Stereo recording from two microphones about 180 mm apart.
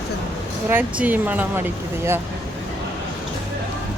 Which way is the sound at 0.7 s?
10° right (ahead or behind).